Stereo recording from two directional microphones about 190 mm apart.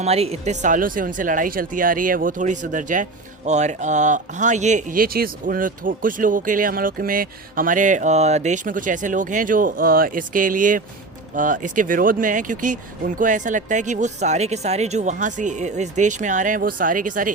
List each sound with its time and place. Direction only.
0.0 s speech: 35° right (ahead or behind)